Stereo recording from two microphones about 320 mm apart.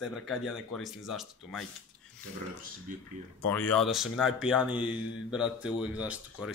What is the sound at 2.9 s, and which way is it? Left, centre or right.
Speech, right.